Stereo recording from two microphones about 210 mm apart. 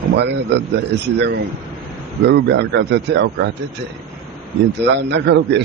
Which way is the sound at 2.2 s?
55° right (ahead or behind).